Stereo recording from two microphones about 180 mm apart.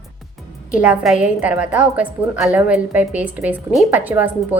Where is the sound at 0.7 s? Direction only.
5° right (ahead or behind).